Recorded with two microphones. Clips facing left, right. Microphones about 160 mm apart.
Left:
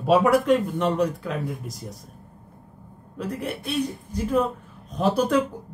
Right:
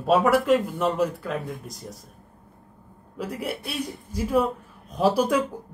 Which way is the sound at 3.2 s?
10° right (ahead or behind).